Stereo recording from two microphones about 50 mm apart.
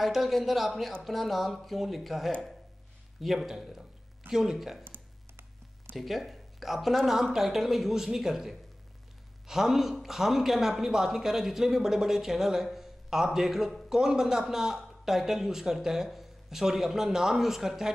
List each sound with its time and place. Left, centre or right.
0.0 s a woman's voice: centre
4.8 s computer keyboard: right
5.9 s a woman's voice: centre